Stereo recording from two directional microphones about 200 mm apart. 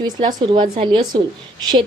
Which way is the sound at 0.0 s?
20° right (ahead or behind).